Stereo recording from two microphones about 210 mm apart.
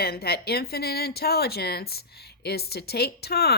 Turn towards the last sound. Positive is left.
turn(degrees=50)  # may be behind; listen again after turning